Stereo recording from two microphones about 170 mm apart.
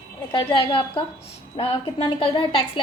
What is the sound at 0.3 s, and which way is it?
A woman's voice, 30° left (ahead or behind).